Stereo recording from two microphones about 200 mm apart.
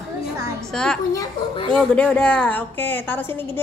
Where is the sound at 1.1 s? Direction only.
15° left (ahead or behind).